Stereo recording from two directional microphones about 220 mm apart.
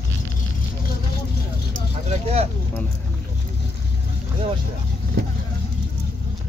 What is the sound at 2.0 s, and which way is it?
Vehicle, 30° right (ahead or behind).